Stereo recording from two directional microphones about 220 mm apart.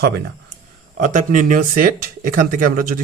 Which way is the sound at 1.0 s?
35° right (ahead or behind).